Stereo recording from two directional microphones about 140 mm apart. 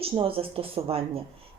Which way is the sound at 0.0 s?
40° right (ahead or behind).